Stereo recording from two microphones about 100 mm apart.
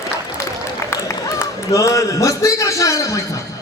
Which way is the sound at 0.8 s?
30° left (ahead or behind).